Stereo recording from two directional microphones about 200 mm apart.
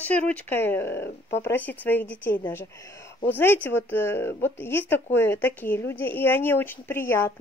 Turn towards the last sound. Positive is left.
turn(degrees=10)  # may be behind; listen again after turning